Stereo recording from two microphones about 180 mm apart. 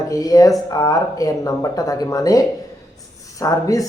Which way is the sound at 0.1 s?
20° left (ahead or behind).